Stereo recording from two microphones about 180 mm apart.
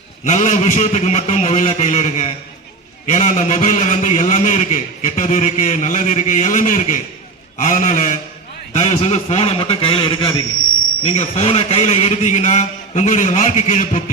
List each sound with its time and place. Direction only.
0.3 s a man's voice: 45° left (ahead or behind)